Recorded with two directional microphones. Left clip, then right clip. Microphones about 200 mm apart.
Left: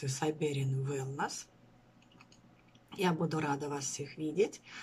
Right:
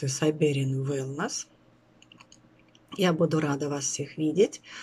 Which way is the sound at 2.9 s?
10° left (ahead or behind).